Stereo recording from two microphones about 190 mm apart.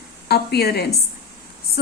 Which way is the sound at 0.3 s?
55° left (ahead or behind).